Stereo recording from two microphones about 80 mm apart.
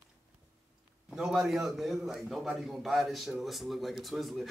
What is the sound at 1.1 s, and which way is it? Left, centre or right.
A man's voice, centre.